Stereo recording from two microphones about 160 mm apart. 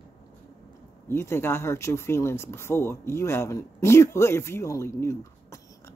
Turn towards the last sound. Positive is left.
turn(degrees=15)  # may be behind; listen again after turning